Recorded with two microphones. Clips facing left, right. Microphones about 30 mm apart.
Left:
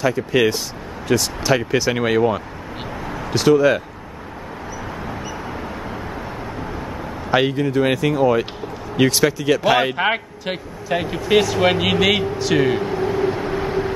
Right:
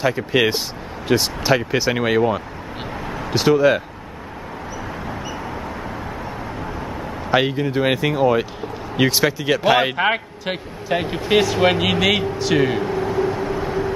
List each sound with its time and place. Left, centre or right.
0.0 s speech: centre
1.8 s speech: centre
7.2 s speech: centre
7.8 s speech: centre
9.9 s speech: centre
13.2 s vehicle: left